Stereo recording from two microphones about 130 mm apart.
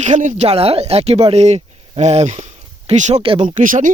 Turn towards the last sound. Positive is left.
turn(degrees=-85)